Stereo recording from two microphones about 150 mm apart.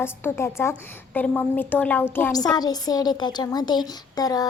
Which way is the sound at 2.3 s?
25° left (ahead or behind).